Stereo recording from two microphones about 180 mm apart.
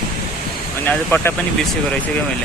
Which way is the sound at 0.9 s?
10° left (ahead or behind).